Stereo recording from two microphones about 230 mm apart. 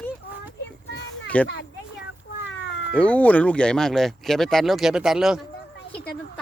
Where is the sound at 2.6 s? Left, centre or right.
Left.